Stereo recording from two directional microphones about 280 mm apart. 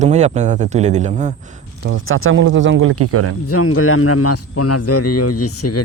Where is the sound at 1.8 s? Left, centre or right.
Right.